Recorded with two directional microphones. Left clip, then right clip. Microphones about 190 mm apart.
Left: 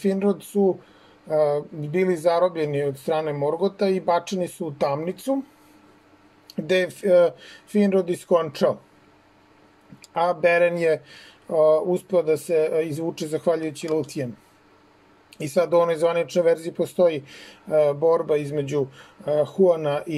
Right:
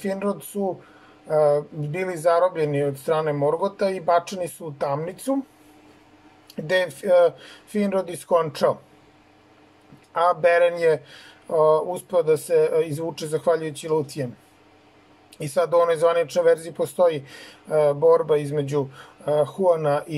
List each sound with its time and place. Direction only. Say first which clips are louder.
0.0 s speech: left 3 dB; 25° left (ahead or behind)
6.7 s speech: even; 30° left (ahead or behind)
10.1 s speech: right 1 dB; 30° left (ahead or behind)
15.3 s speech: even; 30° left (ahead or behind)